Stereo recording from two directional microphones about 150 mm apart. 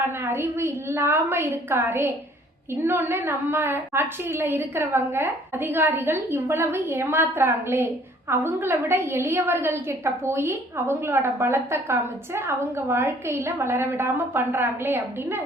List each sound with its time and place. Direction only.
0.2 s a woman's voice: 15° right (ahead or behind)